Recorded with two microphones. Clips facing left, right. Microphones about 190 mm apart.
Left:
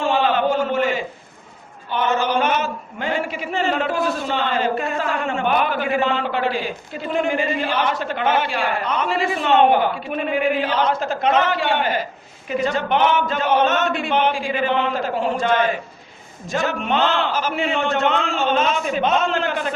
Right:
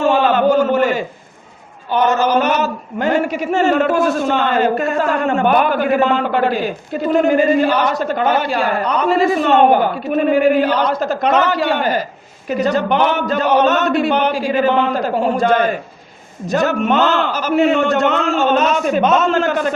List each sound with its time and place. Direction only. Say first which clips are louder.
0.0 s a sound: right 5 dB; 45° right (ahead or behind)
1.9 s a man's voice: right 6 dB; 40° right (ahead or behind)
12.5 s chant: right 5 dB; 40° right (ahead or behind)
16.5 s a man's voice: right 6 dB; 40° right (ahead or behind)